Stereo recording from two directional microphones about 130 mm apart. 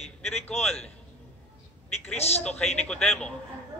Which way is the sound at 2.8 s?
5° left (ahead or behind).